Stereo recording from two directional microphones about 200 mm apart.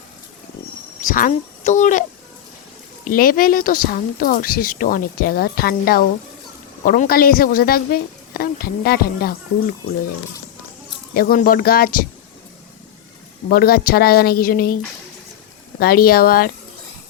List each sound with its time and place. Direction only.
1.0 s speech: 40° left (ahead or behind)
11.1 s speech: 45° left (ahead or behind)
13.5 s speech: 50° left (ahead or behind)
15.8 s speech: 50° left (ahead or behind)